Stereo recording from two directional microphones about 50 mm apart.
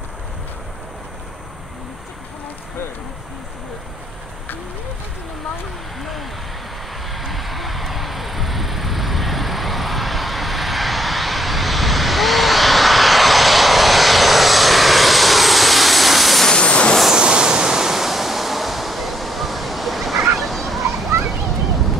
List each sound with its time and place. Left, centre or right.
5.9 s speech: centre
7.1 s vehicle: centre
16.4 s vehicle: centre
17.1 s waves: centre
20.3 s a sound: centre